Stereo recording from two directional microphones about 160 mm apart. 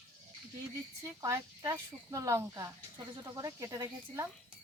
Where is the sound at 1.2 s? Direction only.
20° right (ahead or behind).